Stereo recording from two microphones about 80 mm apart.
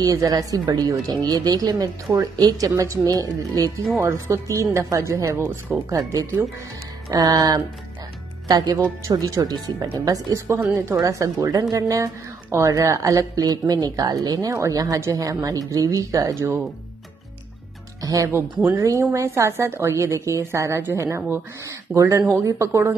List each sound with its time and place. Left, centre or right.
0.0 s speech: right
4.0 s a woman's voice: right
9.0 s speech: right
12.4 s speech: right
18.0 s speech: right
18.3 s speech: right
18.8 s a woman's voice: right